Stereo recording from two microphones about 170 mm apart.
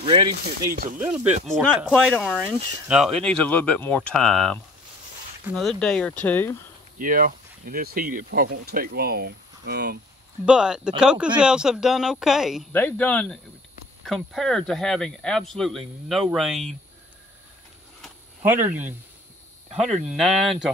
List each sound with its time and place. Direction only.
0.0 s speech: 30° right (ahead or behind)
0.6 s speech: 60° right (ahead or behind)
1.5 s speech: centre (ahead or behind)
7.0 s speech: 55° right (ahead or behind)
10.4 s speech: 5° right (ahead or behind)
12.7 s speech: 10° left (ahead or behind)
18.4 s speech: 10° right (ahead or behind)
20.1 s speech: centre (ahead or behind)